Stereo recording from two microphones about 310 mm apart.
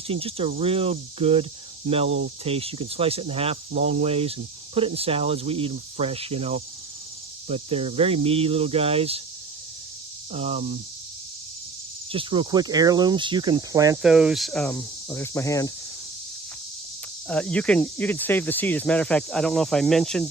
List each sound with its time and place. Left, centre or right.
0.1 s speech: centre
10.3 s speech: centre
12.1 s speech: centre
17.2 s speech: centre